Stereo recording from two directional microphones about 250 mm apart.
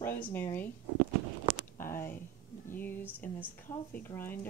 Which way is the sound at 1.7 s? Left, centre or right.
Centre.